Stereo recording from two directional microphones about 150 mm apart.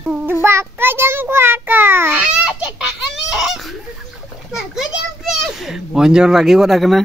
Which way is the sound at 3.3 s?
Centre (ahead or behind).